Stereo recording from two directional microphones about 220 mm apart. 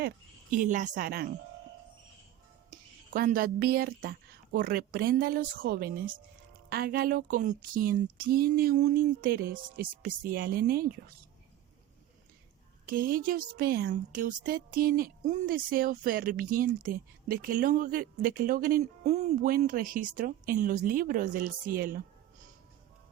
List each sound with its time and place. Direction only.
0.5 s speech: 35° right (ahead or behind)
2.6 s a woman's voice: 40° right (ahead or behind)
12.9 s speech: 40° right (ahead or behind)